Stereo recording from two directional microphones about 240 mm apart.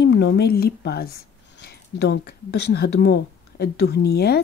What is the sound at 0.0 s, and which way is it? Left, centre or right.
Speech, left.